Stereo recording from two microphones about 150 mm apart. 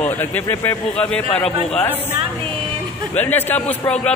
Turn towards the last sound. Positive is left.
turn(degrees=5)  # may be behind; listen again after turning